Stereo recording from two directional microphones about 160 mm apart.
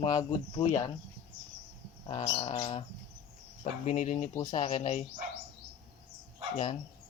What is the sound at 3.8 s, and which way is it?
Speech, 55° left (ahead or behind).